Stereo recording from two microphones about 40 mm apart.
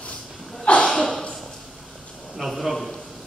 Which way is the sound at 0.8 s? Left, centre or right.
Centre.